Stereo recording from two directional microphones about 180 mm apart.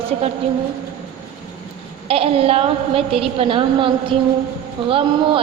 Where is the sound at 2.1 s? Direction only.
30° right (ahead or behind).